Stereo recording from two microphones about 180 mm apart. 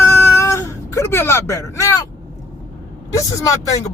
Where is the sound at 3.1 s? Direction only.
20° left (ahead or behind).